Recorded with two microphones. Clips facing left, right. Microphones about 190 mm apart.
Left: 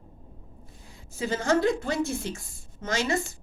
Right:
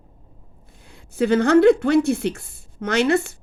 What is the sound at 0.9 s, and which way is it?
A woman's voice, 65° right (ahead or behind).